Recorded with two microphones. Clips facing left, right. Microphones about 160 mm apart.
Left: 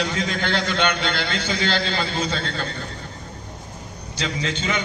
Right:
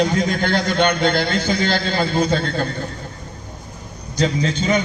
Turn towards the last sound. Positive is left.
turn(degrees=-40)  # may be behind; listen again after turning